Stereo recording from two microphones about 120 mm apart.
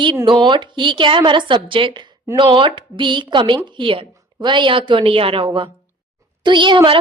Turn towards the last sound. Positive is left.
turn(degrees=-40)  # may be behind; listen again after turning